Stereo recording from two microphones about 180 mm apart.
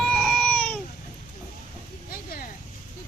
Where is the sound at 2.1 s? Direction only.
55° left (ahead or behind).